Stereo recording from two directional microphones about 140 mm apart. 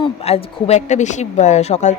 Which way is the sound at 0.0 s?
45° left (ahead or behind).